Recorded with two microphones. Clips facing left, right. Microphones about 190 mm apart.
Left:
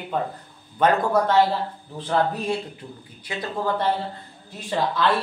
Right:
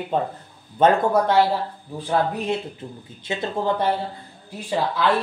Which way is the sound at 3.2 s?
25° right (ahead or behind).